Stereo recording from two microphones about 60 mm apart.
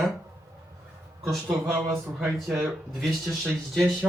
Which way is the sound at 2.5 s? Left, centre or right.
Centre.